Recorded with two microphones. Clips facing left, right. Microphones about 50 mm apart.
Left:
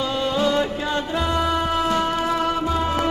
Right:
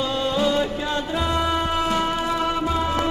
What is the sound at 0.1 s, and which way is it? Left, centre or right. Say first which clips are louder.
Music: left 1 dB; centre.